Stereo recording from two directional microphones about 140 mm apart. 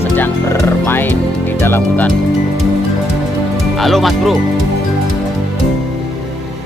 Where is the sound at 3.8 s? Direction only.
Centre (ahead or behind).